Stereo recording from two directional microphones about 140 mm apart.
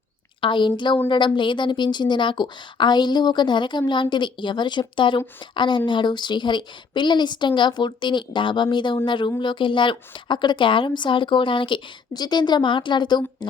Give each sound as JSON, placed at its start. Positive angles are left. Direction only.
{"t": 0.4, "sound": "a woman's voice", "side_deg": 35}